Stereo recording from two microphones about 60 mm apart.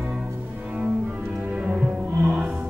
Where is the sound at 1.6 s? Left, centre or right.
Right.